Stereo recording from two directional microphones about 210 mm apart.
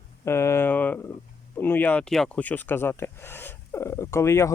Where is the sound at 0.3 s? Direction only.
10° left (ahead or behind).